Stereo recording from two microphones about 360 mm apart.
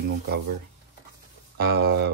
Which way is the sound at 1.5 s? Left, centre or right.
Right.